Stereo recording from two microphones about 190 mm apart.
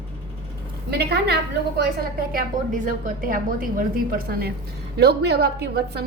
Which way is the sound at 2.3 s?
45° right (ahead or behind).